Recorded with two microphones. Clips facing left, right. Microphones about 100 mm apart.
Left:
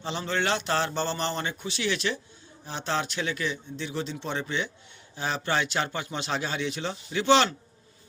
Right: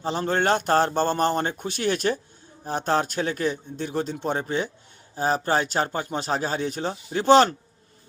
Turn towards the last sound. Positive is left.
turn(degrees=-45)  # may be behind; listen again after turning